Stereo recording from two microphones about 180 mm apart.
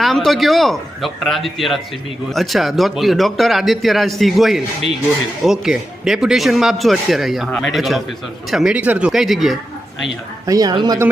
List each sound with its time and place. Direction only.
0.0 s speech: centre (ahead or behind)
10.4 s speech: 20° right (ahead or behind)